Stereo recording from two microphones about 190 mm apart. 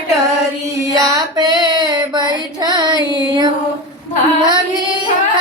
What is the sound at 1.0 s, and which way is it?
Female singing, 20° right (ahead or behind).